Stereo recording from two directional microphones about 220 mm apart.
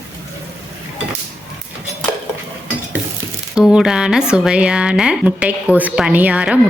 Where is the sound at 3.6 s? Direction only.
5° right (ahead or behind).